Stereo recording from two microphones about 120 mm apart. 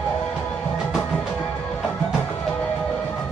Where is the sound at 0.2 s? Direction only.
5° left (ahead or behind).